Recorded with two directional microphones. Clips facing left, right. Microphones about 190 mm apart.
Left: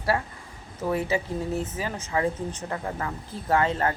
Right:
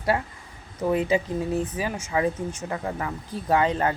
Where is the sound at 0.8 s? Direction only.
15° right (ahead or behind).